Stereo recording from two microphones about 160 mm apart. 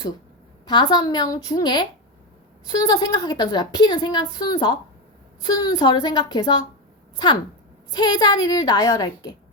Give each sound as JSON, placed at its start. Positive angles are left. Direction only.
{"t": 0.6, "sound": "a woman's voice", "side_deg": 25}
{"t": 7.9, "sound": "a woman's voice", "side_deg": 25}